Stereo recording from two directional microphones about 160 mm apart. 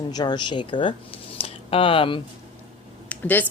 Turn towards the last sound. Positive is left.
turn(degrees=10)  # may be behind; listen again after turning